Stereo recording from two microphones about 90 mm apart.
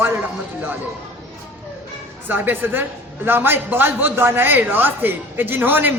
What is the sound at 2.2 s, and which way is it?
Speech, 25° right (ahead or behind).